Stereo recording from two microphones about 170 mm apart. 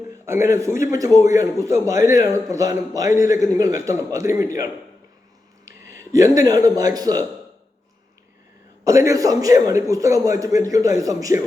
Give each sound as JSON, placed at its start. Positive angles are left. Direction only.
{"t": 0.3, "sound": "a man's voice", "side_deg": -15}
{"t": 8.8, "sound": "a man's voice", "side_deg": -20}